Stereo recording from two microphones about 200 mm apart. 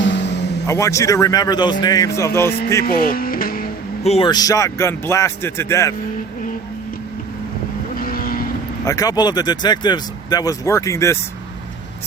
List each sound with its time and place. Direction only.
0.0 s a sound: 60° left (ahead or behind)
0.7 s speech: 15° left (ahead or behind)
2.8 s speech: 45° left (ahead or behind)
4.0 s a man's voice: 30° left (ahead or behind)
4.3 s speech: 20° left (ahead or behind)
7.9 s vehicle: 45° left (ahead or behind)
8.8 s speech: 15° left (ahead or behind)